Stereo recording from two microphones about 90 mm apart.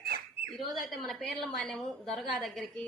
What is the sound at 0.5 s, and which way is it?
A woman's voice, centre (ahead or behind).